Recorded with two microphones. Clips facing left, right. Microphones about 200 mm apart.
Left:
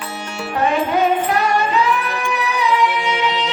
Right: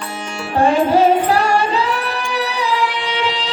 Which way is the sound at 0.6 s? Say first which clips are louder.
Right 4 dB; 30° right (ahead or behind).